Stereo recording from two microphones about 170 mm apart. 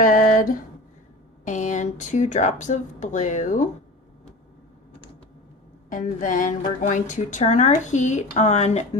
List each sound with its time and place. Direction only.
0.0 s a sound: 50° left (ahead or behind)
1.5 s a woman's voice: 45° left (ahead or behind)
5.9 s a woman's voice: 50° left (ahead or behind)